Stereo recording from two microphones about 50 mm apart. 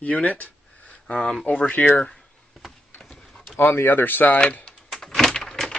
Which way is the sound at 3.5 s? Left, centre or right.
Left.